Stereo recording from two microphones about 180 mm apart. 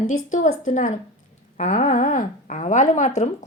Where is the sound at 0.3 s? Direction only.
45° left (ahead or behind).